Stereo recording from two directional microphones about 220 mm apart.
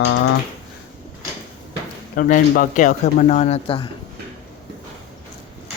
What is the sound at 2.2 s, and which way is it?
Speech, 40° left (ahead or behind).